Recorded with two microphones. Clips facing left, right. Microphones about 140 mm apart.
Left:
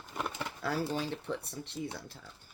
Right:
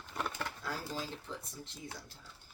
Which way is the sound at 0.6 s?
70° left (ahead or behind).